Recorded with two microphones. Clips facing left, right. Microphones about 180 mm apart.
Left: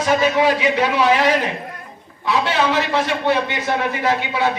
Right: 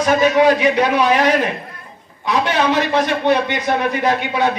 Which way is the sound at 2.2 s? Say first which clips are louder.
Right 1 dB; 15° right (ahead or behind).